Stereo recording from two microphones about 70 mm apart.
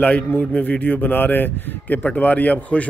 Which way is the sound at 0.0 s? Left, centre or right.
Centre.